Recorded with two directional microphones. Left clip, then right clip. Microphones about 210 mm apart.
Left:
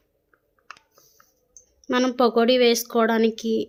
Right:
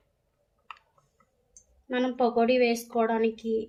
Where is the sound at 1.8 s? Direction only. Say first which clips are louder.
Left 6 dB; 55° left (ahead or behind).